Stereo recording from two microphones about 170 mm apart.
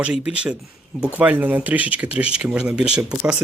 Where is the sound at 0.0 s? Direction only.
5° right (ahead or behind).